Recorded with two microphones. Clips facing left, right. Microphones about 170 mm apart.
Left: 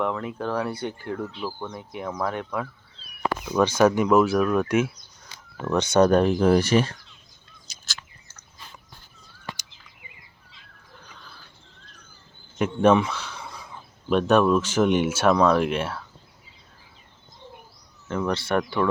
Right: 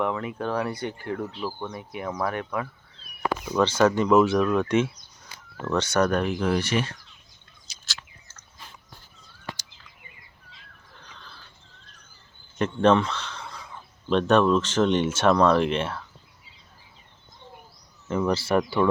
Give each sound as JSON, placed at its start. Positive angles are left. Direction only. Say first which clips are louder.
{"t": 0.0, "sound": "speech", "louder": "even", "side_deg": -10}
{"t": 3.2, "sound": "speech", "louder": "left 1 dB", "side_deg": 5}
{"t": 7.7, "sound": "bird", "louder": "left 2 dB", "side_deg": 45}
{"t": 11.0, "sound": "a sound", "louder": "right 1 dB", "side_deg": 5}
{"t": 12.5, "sound": "a sound", "louder": "left 1 dB", "side_deg": 10}
{"t": 14.1, "sound": "speech", "louder": "left 1 dB", "side_deg": 5}
{"t": 18.1, "sound": "speech", "louder": "right 1 dB", "side_deg": -5}